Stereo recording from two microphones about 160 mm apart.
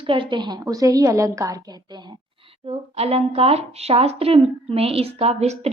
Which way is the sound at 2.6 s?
40° right (ahead or behind).